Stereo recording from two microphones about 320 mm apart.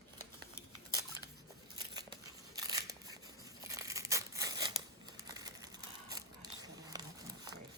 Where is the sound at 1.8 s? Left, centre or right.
Centre.